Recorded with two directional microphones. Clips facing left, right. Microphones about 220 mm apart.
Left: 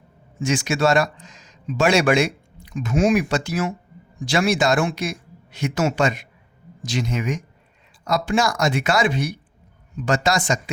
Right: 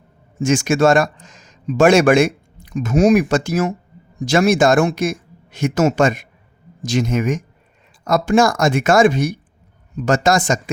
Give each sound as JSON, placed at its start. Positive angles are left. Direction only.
{"t": 0.3, "sound": "speech", "side_deg": -45}